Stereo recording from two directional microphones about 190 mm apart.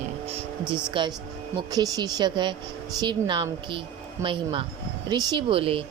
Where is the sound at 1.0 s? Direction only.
25° right (ahead or behind).